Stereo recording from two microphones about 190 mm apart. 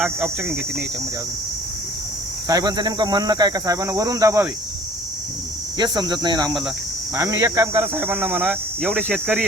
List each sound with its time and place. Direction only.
0.0 s speech: 10° right (ahead or behind)
2.5 s speech: 20° right (ahead or behind)
5.7 s speech: 20° right (ahead or behind); by 9.4 s 5° right (ahead or behind)